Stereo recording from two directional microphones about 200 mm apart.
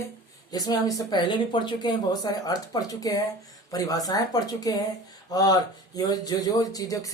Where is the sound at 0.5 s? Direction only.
20° left (ahead or behind).